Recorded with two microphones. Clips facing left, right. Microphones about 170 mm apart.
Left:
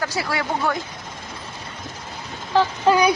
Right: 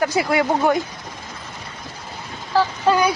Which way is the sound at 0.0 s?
20° right (ahead or behind).